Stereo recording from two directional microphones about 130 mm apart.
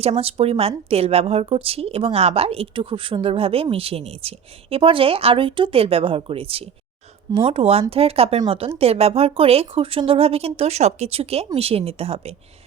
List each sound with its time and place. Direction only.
0.0 s a woman's voice: 50° right (ahead or behind)